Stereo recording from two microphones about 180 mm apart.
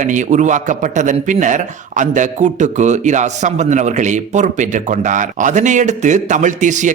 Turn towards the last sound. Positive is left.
turn(degrees=-45)  # may be behind; listen again after turning